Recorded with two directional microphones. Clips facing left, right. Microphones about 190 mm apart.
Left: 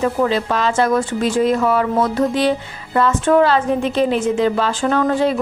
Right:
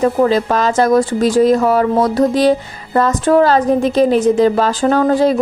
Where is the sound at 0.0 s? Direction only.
40° right (ahead or behind).